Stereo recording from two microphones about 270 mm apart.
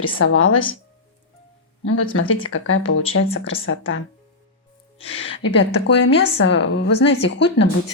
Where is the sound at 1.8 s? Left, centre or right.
Left.